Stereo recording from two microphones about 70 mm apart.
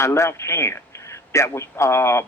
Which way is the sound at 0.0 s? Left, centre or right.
Left.